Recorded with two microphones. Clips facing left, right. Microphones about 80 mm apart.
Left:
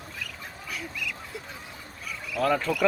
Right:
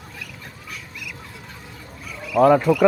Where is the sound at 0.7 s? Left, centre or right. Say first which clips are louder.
Left 3 dB; centre.